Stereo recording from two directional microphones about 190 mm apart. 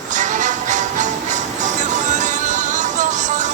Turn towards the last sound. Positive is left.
turn(degrees=-40)  # may be behind; listen again after turning